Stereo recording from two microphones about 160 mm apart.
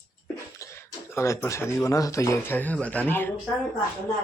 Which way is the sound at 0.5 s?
15° left (ahead or behind).